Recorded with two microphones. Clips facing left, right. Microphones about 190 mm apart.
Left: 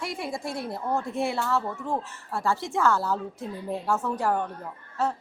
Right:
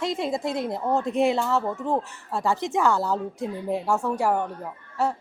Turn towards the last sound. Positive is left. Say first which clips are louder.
# right 2 dB
turn(degrees=-15)  # may be behind; listen again after turning